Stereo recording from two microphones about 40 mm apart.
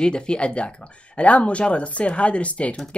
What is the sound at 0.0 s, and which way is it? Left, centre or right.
Speech, left.